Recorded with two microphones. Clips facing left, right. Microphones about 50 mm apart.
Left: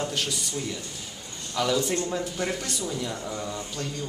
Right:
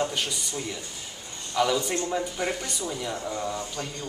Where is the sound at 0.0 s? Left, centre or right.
Centre.